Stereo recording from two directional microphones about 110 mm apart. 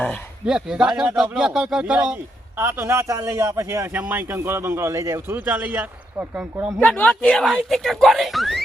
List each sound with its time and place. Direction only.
0.4 s speech: 5° right (ahead or behind)
2.6 s a man's voice: 20° right (ahead or behind)
3.9 s a man's voice: 15° right (ahead or behind)
5.5 s a man's voice: 15° right (ahead or behind)
6.7 s speech: 15° left (ahead or behind)